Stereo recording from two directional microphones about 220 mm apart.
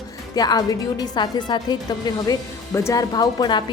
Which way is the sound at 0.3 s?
15° left (ahead or behind).